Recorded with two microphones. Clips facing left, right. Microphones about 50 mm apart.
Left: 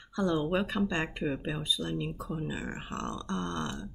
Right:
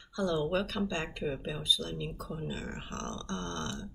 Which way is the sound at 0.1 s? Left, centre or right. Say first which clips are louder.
Left 2 dB; left.